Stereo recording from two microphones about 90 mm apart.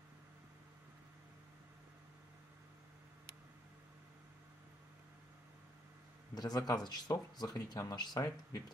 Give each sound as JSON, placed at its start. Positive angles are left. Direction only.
{"t": 6.3, "sound": "speech", "side_deg": 45}